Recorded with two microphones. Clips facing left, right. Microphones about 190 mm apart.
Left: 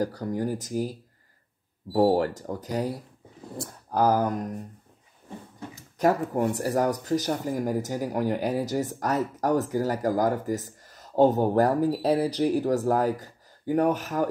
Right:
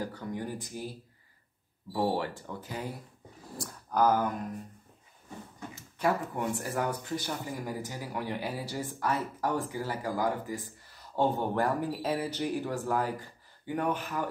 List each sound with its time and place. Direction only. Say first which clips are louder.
0.0 s speech: left 8 dB; 40° left (ahead or behind)
3.5 s speech: left 3 dB; 30° left (ahead or behind)
5.8 s a sound: left 6 dB; 40° left (ahead or behind)
6.3 s speech: left 8 dB; 40° left (ahead or behind)